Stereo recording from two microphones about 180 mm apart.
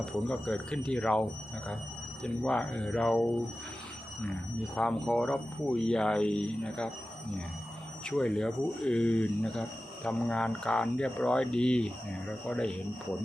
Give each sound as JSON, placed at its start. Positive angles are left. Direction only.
{"t": 0.0, "sound": "speech", "side_deg": 5}
{"t": 4.7, "sound": "speech", "side_deg": 5}
{"t": 8.0, "sound": "speech", "side_deg": 5}